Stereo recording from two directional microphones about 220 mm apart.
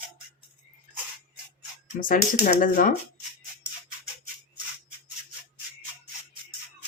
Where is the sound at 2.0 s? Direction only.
40° left (ahead or behind).